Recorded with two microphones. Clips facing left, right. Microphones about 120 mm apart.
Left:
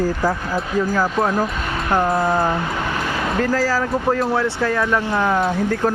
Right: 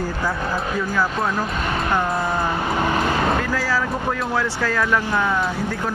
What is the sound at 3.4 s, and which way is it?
Speech, 40° left (ahead or behind).